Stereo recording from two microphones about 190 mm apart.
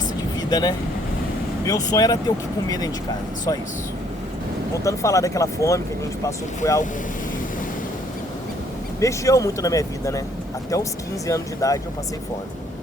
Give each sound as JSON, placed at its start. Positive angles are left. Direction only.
{"t": 0.5, "sound": "speech", "side_deg": 20}
{"t": 4.8, "sound": "speech", "side_deg": 15}
{"t": 9.0, "sound": "speech", "side_deg": 15}
{"t": 11.3, "sound": "speech", "side_deg": 15}